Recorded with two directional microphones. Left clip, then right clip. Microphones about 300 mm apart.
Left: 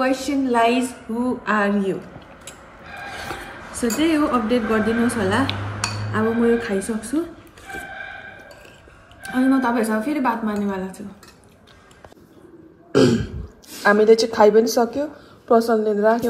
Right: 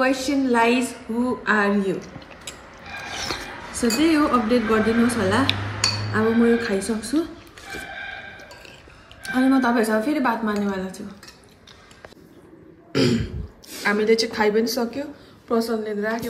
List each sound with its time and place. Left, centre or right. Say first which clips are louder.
0.0 s a woman's voice: even; centre
3.1 s a sound: right 2 dB; centre
5.1 s a woman's voice: even; centre
9.3 s a woman's voice: even; centre
12.9 s speech: left 5 dB; centre